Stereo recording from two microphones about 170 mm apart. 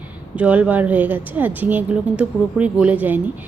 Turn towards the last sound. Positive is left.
turn(degrees=-10)  # may be behind; listen again after turning